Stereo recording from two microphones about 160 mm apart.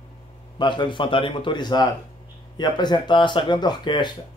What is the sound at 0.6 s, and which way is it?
Speech, 30° left (ahead or behind).